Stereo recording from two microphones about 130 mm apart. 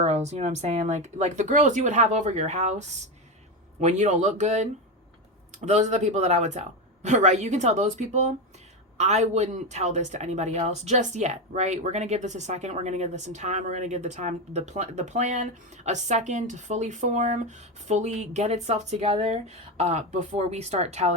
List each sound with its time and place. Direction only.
0.0 s speech: 60° right (ahead or behind)